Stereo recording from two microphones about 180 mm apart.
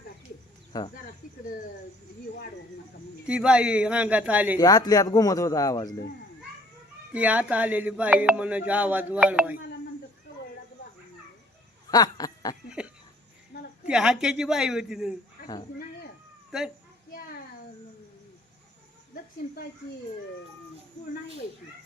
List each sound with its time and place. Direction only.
0.7 s a man's voice: 25° left (ahead or behind)
3.2 s speech: 5° right (ahead or behind)
4.5 s a man's voice: 20° left (ahead or behind)
7.1 s speech: 10° right (ahead or behind)
11.9 s a sound: 20° left (ahead or behind)
12.6 s a sound: 5° right (ahead or behind)
13.8 s a man's voice: 5° right (ahead or behind)
16.5 s a child's voice: centre (ahead or behind)